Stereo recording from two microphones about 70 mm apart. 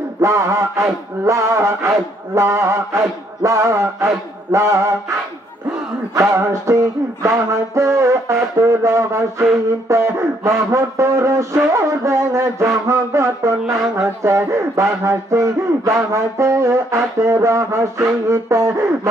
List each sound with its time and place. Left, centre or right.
0.2 s a man's voice: right
7.2 s a man's voice: right